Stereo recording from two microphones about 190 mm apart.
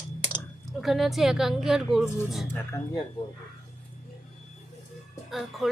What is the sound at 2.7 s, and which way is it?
Speech, 15° left (ahead or behind).